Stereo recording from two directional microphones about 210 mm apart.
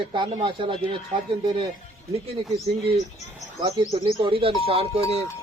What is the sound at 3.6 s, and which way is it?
Speech, 30° right (ahead or behind).